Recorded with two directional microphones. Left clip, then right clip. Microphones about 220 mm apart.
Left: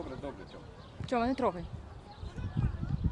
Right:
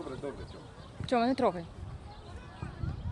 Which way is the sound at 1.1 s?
20° right (ahead or behind).